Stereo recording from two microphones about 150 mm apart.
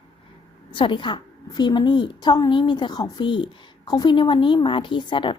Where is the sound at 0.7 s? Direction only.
35° left (ahead or behind).